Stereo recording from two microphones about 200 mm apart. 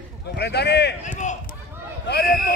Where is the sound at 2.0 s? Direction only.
55° left (ahead or behind).